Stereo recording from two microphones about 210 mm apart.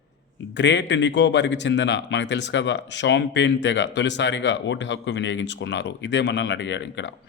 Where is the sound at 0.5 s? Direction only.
55° left (ahead or behind).